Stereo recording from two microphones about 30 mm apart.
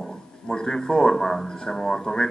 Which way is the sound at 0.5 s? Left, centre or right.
Left.